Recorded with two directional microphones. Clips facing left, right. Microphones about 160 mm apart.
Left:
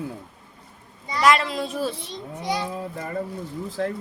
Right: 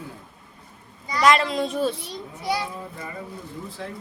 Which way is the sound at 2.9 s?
50° left (ahead or behind).